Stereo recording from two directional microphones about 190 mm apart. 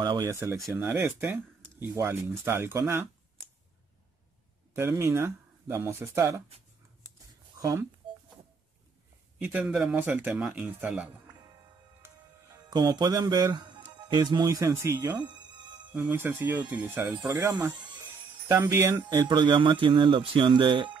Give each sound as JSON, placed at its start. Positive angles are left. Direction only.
{"t": 0.0, "sound": "speech", "side_deg": -20}
{"t": 4.7, "sound": "speech", "side_deg": -15}
{"t": 9.4, "sound": "speech", "side_deg": -10}
{"t": 12.6, "sound": "speech", "side_deg": -20}
{"t": 15.1, "sound": "music", "side_deg": -25}
{"t": 15.9, "sound": "speech", "side_deg": -10}